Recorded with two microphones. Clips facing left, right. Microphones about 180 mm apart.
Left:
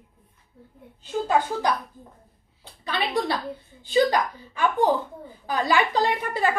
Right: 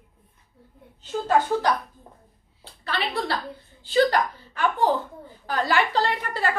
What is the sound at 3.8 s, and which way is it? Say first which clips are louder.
A woman's voice: even; 15° left (ahead or behind).